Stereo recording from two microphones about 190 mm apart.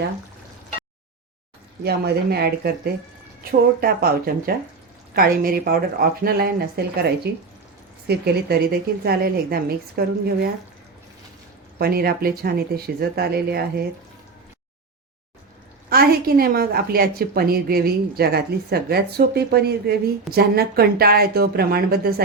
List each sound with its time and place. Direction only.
1.8 s a woman's voice: 55° right (ahead or behind)
11.8 s a woman's voice: 55° right (ahead or behind)
15.9 s a woman's voice: 55° right (ahead or behind)